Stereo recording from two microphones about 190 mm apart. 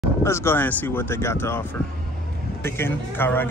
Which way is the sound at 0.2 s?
15° left (ahead or behind).